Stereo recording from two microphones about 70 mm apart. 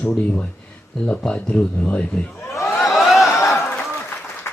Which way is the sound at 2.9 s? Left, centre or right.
Centre.